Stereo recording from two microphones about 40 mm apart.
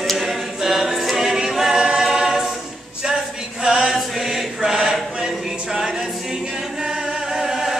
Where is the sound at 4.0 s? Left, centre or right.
Centre.